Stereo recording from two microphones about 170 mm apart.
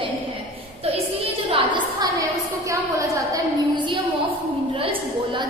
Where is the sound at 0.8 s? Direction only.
35° right (ahead or behind).